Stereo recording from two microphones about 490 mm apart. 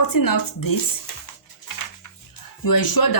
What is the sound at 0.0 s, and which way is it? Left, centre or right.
Speech, left.